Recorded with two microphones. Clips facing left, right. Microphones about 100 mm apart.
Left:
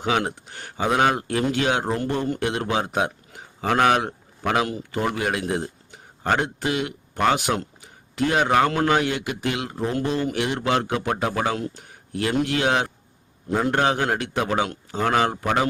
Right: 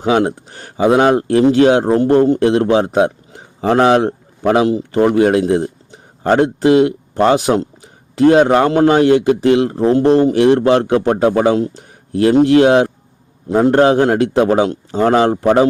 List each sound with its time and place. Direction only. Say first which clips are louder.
0.0 s a man's voice: right 9 dB; 35° right (ahead or behind)